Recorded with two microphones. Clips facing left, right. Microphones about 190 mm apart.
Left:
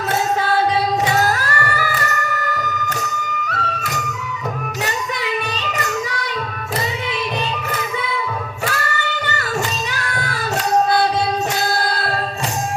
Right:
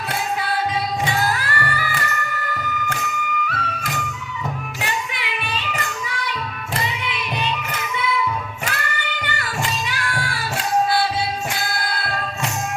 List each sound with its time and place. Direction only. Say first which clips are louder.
1.0 s music: left 4 dB; 40° left (ahead or behind)
4.8 s child singing: left 4 dB; 40° left (ahead or behind)
8.6 s music: left 5 dB; 40° left (ahead or behind)
9.9 s child singing: left 1 dB; 40° left (ahead or behind)
11.7 s music: left 6 dB; 40° left (ahead or behind)